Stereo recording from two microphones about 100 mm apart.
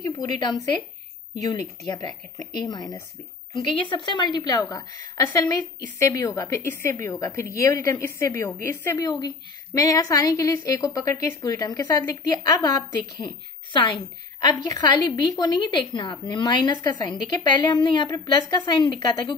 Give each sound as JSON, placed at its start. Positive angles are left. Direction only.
{"t": 0.1, "sound": "a woman's voice", "side_deg": 45}
{"t": 3.5, "sound": "a woman's voice", "side_deg": 55}
{"t": 6.7, "sound": "a woman's voice", "side_deg": 25}
{"t": 9.0, "sound": "a woman's voice", "side_deg": 40}
{"t": 12.0, "sound": "a woman's voice", "side_deg": 25}
{"t": 12.3, "sound": "a woman's voice", "side_deg": 40}
{"t": 14.7, "sound": "a woman's voice", "side_deg": 40}